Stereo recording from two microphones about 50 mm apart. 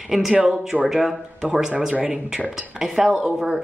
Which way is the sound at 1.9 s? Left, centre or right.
Right.